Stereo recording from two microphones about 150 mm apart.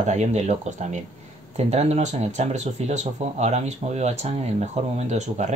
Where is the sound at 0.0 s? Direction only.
50° right (ahead or behind).